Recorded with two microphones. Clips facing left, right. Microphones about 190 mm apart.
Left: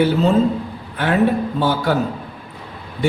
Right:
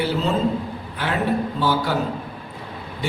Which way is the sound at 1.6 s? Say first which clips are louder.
Left 3 dB; 50° left (ahead or behind).